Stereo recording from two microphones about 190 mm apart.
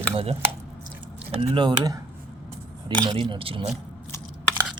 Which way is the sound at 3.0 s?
25° right (ahead or behind).